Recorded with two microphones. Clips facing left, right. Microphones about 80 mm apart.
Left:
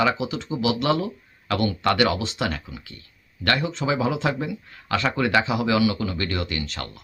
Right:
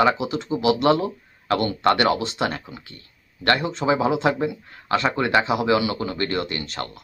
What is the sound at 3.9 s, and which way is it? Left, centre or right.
Speech, right.